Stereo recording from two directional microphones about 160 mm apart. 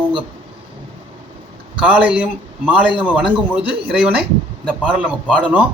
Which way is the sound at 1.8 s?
5° right (ahead or behind).